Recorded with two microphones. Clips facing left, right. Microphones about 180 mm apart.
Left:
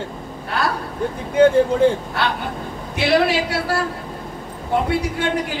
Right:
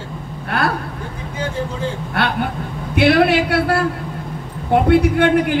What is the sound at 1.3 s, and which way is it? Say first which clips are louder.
Speech: left 12 dB; 60° left (ahead or behind).